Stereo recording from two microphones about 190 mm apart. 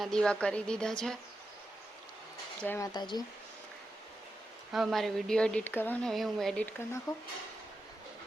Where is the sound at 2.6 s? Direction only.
10° left (ahead or behind).